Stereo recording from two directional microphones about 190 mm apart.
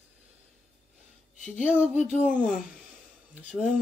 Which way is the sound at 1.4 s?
40° left (ahead or behind).